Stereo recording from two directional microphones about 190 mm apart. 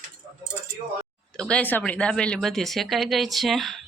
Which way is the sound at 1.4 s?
5° left (ahead or behind).